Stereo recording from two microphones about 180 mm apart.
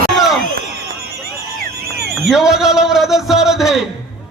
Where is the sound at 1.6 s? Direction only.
60° right (ahead or behind).